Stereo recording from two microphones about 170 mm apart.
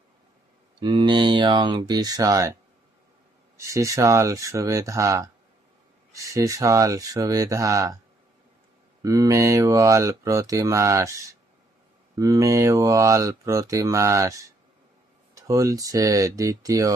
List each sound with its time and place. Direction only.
0.8 s speech: 25° right (ahead or behind)
3.6 s speech: 15° right (ahead or behind)
9.0 s speech: 20° right (ahead or behind)
15.4 s speech: 20° right (ahead or behind)